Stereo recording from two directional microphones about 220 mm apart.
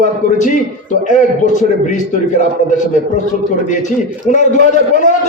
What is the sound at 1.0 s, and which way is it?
A man's voice, 35° left (ahead or behind).